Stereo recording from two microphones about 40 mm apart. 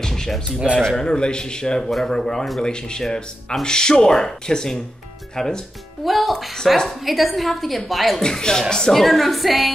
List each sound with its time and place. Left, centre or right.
0.0 s music: centre
0.5 s speech: right
0.8 s speech: centre
1.8 s speech: centre
6.0 s a woman's voice: centre
8.2 s speech: centre
8.9 s a woman's voice: centre